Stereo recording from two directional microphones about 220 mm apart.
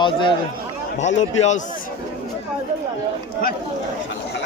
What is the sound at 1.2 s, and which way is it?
Speech, 30° left (ahead or behind).